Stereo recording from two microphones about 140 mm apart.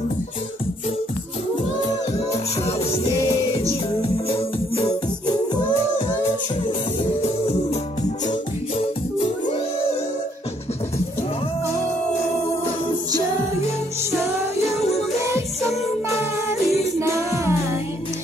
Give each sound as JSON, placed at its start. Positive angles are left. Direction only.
{"t": 2.8, "sound": "music", "side_deg": 45}
{"t": 7.2, "sound": "music", "side_deg": 45}
{"t": 14.6, "sound": "music", "side_deg": 50}
{"t": 17.0, "sound": "music", "side_deg": -20}